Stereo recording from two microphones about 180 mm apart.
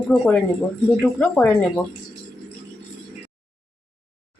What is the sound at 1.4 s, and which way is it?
Speech, 10° left (ahead or behind).